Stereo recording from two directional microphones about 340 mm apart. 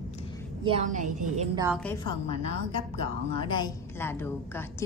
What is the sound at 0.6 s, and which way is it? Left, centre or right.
Speech, centre.